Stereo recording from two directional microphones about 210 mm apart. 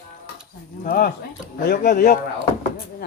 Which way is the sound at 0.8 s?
45° left (ahead or behind).